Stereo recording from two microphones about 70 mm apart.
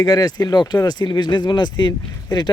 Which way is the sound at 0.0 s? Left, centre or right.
Left.